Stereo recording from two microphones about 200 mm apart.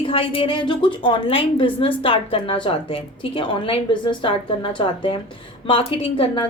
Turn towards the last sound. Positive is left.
turn(degrees=25)  # may be behind; listen again after turning